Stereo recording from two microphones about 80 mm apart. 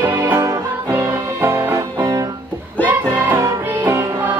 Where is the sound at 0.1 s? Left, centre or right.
Right.